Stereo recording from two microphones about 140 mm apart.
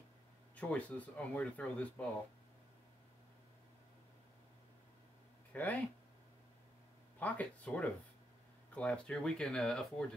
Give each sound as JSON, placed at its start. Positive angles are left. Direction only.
{"t": 0.6, "sound": "speech", "side_deg": 10}
{"t": 5.5, "sound": "speech", "side_deg": 10}
{"t": 7.2, "sound": "speech", "side_deg": 10}